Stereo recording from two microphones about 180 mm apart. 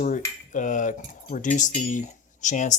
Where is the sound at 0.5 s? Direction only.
45° left (ahead or behind).